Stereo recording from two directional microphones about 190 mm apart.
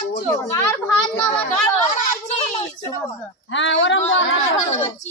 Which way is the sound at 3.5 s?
80° left.